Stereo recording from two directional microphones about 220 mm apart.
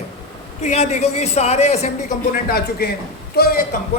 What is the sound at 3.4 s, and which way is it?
Speech, 45° left (ahead or behind).